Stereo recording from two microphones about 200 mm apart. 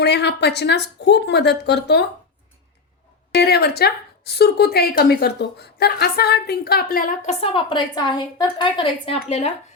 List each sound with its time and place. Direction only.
0.0 s speech: 55° left (ahead or behind)
3.3 s a woman's voice: 55° left (ahead or behind); by 9.5 s 30° left (ahead or behind)